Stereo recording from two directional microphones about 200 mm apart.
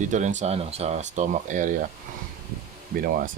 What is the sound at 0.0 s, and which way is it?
Speech, 40° right (ahead or behind).